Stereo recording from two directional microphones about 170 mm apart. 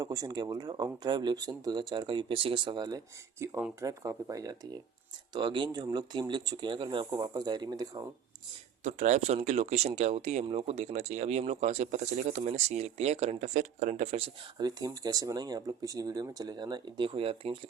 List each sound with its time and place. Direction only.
0.0 s speech: 20° right (ahead or behind)
8.8 s speech: 45° right (ahead or behind)
14.6 s speech: 25° right (ahead or behind)